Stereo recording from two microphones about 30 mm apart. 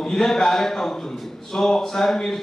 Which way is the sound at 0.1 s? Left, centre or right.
Centre.